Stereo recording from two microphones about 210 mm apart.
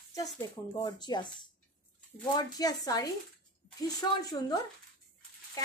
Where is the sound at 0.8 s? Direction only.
20° left (ahead or behind).